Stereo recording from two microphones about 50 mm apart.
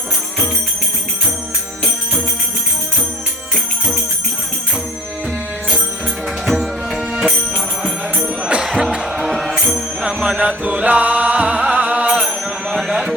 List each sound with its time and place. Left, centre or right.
6.4 s music: centre
8.2 s music: right
9.1 s music: centre
10.4 s music: right
12.7 s a sound: centre